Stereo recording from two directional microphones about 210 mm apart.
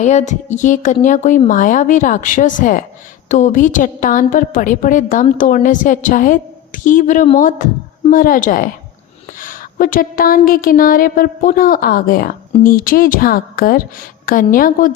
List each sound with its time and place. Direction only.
0.0 s a woman's voice: 35° left (ahead or behind)